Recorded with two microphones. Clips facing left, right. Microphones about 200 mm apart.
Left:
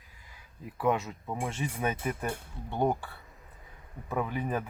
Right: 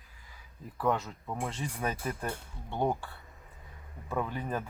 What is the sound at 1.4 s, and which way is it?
Speech, 20° left (ahead or behind).